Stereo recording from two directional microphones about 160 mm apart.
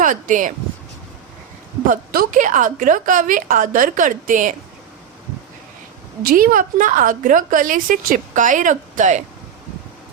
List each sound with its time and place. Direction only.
0.0 s speech: 55° right (ahead or behind)
1.9 s a woman's voice: 55° right (ahead or behind)
6.2 s a woman's voice: 65° right (ahead or behind)